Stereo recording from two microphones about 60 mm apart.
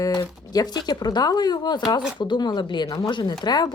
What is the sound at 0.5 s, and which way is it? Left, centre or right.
Speech, left.